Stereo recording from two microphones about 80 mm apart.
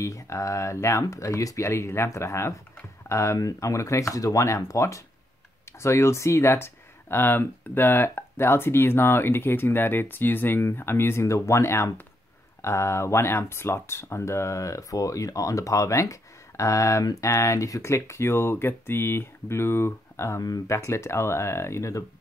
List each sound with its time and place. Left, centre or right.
0.0 s speech: left